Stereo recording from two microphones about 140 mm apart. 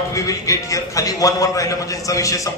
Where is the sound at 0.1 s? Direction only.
25° left (ahead or behind).